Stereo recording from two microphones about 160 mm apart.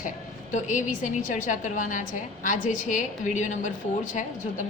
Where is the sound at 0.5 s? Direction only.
50° left (ahead or behind).